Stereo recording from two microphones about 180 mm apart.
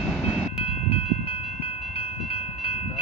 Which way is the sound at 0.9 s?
30° left (ahead or behind).